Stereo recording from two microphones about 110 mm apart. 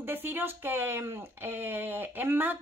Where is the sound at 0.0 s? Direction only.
20° right (ahead or behind).